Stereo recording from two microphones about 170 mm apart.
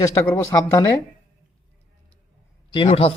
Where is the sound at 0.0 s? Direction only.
20° left (ahead or behind).